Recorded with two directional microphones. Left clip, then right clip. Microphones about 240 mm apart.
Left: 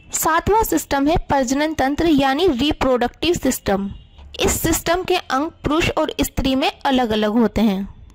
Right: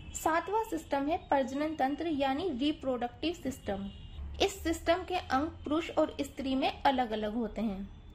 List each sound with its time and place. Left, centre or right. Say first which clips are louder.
0.2 s a woman's voice: left 14 dB; left